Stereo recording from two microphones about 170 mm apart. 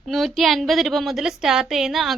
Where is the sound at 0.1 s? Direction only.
Centre (ahead or behind).